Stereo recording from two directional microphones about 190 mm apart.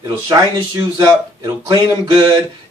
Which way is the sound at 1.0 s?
20° right (ahead or behind).